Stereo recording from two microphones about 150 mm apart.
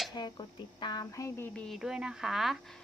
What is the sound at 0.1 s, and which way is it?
A woman's voice, 30° left (ahead or behind).